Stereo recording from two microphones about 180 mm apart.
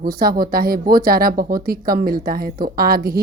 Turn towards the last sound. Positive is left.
turn(degrees=-55)  # may be behind; listen again after turning